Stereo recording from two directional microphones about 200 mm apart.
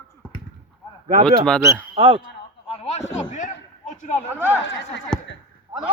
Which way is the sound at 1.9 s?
30° right (ahead or behind).